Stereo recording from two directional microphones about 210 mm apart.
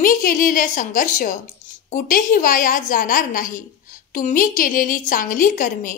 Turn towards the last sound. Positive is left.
turn(degrees=40)  # may be behind; listen again after turning